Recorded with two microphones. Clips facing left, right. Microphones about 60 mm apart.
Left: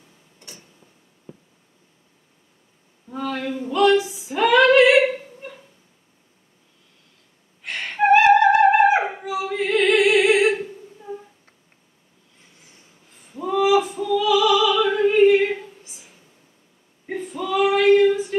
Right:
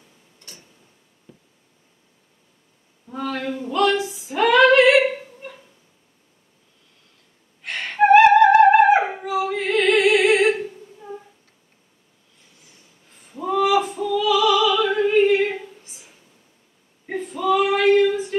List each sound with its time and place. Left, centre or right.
1.3 s a sound: centre
3.1 s speech: centre
3.9 s female singing: centre
7.6 s music: centre
9.2 s singing: centre
13.3 s opera: centre
17.0 s female singing: centre